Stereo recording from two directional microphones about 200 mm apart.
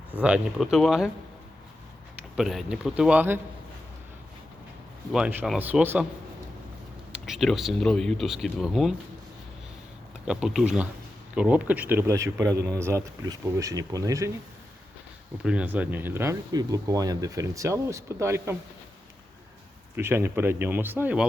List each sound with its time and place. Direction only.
0.1 s speech: 5° right (ahead or behind)
2.3 s speech: centre (ahead or behind)
5.1 s speech: 5° right (ahead or behind)
7.1 s speech: centre (ahead or behind)
10.2 s speech: 5° right (ahead or behind)
15.4 s speech: 5° right (ahead or behind)
20.0 s speech: 10° right (ahead or behind)